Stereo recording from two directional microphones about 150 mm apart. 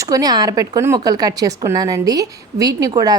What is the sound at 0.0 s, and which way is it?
A woman's voice, 25° right (ahead or behind).